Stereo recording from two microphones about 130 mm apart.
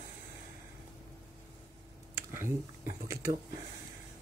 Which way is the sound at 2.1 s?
20° right (ahead or behind).